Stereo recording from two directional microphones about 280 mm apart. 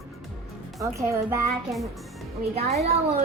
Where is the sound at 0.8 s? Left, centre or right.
Centre.